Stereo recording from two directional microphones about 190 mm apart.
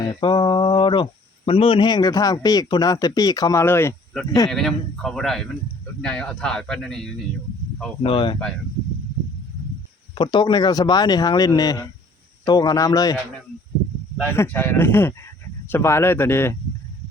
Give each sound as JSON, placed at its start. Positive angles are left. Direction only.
{"t": 0.1, "sound": "speech", "side_deg": 25}
{"t": 8.0, "sound": "speech", "side_deg": 25}
{"t": 10.2, "sound": "speech", "side_deg": 25}
{"t": 14.2, "sound": "speech", "side_deg": 10}